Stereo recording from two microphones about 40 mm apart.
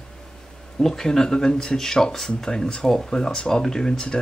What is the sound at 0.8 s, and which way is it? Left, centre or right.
Speech, centre.